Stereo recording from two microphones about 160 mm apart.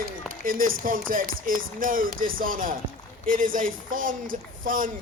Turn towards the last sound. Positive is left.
turn(degrees=-60)  # may be behind; listen again after turning